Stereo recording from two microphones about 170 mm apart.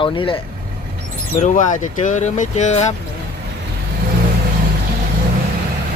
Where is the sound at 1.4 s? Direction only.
50° left (ahead or behind).